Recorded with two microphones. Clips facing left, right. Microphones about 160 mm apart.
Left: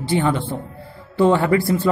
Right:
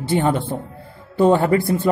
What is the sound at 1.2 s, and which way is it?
Speech, 20° right (ahead or behind).